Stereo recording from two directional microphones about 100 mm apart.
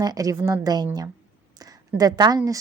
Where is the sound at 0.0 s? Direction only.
35° right (ahead or behind).